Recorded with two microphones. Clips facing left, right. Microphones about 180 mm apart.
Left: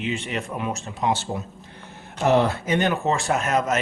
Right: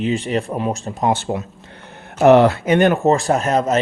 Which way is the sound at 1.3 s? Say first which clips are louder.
Right 6 dB; 80° right.